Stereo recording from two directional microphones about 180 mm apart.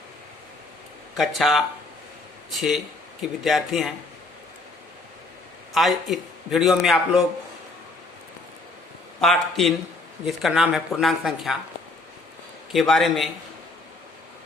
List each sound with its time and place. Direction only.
1.1 s a man's voice: centre (ahead or behind)
5.7 s a man's voice: centre (ahead or behind)
9.2 s a man's voice: centre (ahead or behind)
12.7 s a man's voice: centre (ahead or behind)